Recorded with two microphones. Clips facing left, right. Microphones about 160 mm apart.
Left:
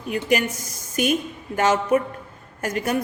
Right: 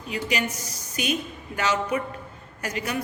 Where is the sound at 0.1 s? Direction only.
50° left (ahead or behind).